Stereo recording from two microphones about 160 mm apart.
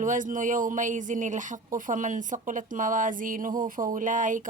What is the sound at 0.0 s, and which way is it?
A woman's voice, 55° right (ahead or behind).